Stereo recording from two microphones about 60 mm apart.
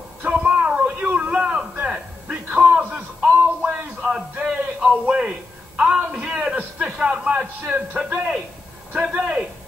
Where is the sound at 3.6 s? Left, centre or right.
Right.